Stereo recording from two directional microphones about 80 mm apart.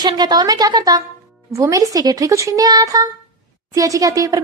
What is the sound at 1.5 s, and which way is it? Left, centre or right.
Speech, right.